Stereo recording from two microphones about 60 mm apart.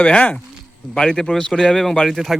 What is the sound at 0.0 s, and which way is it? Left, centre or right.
Speech, left.